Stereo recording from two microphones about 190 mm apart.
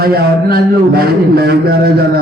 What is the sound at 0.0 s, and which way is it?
A man's voice, 55° right (ahead or behind).